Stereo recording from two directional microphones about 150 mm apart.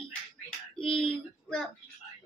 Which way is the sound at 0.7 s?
35° left (ahead or behind).